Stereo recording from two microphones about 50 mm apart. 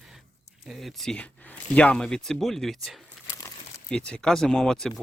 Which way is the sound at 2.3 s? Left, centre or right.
Centre.